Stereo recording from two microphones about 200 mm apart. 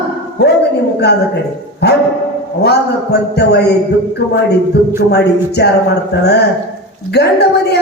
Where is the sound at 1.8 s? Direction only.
55° left (ahead or behind).